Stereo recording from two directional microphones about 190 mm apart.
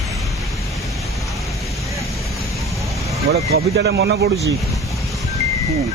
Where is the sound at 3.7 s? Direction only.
60° right (ahead or behind).